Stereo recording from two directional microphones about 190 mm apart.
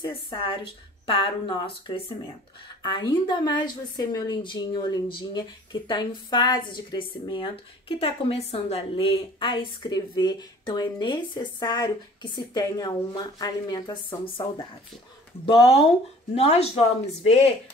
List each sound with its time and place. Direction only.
0.0 s a woman's voice: 25° left (ahead or behind)